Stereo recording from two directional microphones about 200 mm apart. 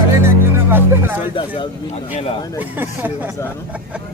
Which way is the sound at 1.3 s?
25° left (ahead or behind).